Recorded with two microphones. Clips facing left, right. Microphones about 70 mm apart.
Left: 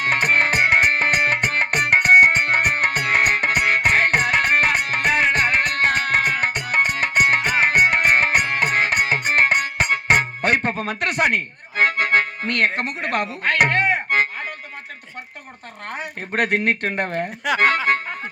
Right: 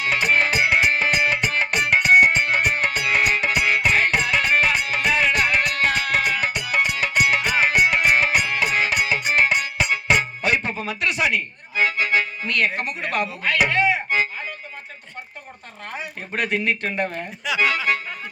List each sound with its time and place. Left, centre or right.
0.0 s music: left
15.9 s speech: left